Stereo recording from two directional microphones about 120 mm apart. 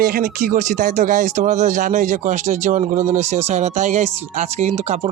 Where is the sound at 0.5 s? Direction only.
90° right.